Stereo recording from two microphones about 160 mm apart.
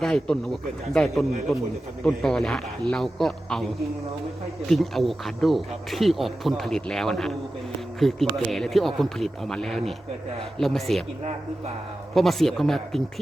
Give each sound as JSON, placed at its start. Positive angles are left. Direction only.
{"t": 0.0, "sound": "speech", "side_deg": 5}
{"t": 4.7, "sound": "speech", "side_deg": 0}
{"t": 12.1, "sound": "speech", "side_deg": 0}